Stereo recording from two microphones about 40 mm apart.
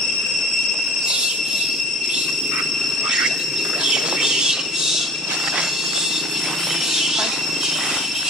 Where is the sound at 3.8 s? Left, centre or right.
Centre.